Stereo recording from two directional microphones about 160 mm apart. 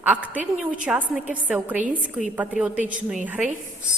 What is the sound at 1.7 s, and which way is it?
Speech, 50° right (ahead or behind).